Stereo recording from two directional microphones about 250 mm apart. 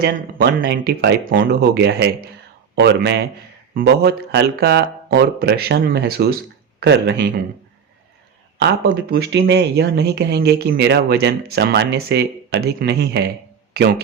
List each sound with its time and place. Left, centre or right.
0.0 s speech: right
8.6 s speech: right